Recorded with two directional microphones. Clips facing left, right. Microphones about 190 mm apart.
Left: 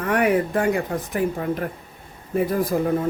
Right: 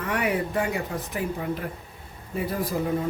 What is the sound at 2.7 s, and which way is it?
Speech, 55° left (ahead or behind).